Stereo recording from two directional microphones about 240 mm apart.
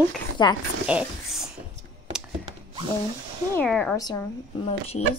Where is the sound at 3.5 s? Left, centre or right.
Centre.